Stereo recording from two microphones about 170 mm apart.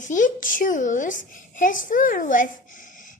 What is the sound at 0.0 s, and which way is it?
A child's voice, 50° left (ahead or behind).